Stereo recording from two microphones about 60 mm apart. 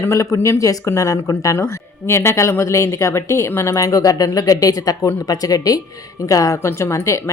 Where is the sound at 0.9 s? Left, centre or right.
Left.